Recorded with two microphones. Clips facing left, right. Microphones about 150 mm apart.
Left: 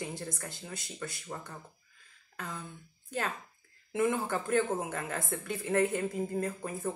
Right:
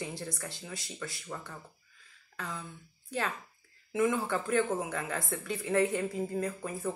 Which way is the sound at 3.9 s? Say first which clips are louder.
Right 1 dB; 50° left (ahead or behind).